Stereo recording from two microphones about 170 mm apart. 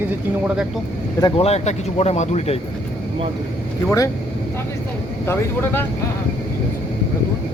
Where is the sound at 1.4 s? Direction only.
40° left (ahead or behind).